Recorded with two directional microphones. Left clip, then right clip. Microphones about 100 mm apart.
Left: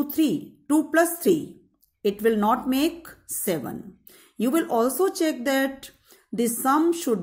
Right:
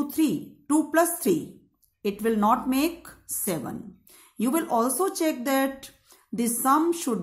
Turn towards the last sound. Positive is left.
turn(degrees=15)  # may be behind; listen again after turning